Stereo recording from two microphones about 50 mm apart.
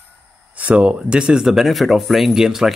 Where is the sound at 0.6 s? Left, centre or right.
Right.